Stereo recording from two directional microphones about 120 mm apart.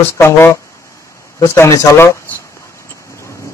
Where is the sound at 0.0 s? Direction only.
20° left (ahead or behind).